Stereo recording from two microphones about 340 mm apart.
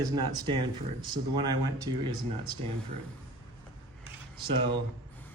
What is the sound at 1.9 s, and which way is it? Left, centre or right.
Speech, centre.